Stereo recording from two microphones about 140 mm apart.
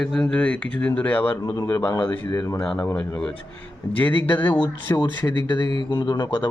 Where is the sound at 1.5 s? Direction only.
25° left (ahead or behind); by 3.3 s 10° left (ahead or behind).